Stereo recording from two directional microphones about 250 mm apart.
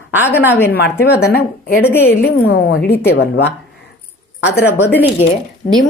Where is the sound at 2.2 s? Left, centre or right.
Left.